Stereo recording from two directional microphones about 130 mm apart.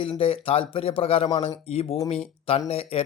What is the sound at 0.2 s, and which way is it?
Speech, 45° left (ahead or behind).